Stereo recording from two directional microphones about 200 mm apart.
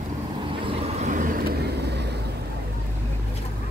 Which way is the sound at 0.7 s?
35° right (ahead or behind).